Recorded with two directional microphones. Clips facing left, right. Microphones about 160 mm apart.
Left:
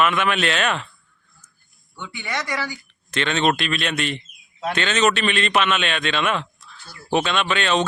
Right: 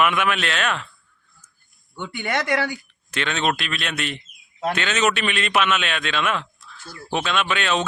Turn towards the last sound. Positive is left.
turn(degrees=-5)  # may be behind; listen again after turning